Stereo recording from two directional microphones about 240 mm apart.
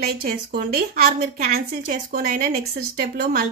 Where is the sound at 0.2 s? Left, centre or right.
Right.